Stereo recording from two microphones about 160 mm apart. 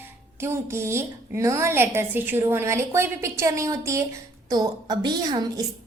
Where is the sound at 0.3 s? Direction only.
15° right (ahead or behind).